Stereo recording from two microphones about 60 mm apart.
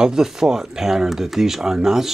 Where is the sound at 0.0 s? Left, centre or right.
Centre.